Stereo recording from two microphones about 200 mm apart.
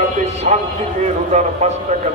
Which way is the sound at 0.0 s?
35° right (ahead or behind).